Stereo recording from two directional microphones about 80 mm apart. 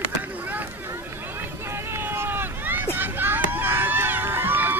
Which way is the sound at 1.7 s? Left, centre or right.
Right.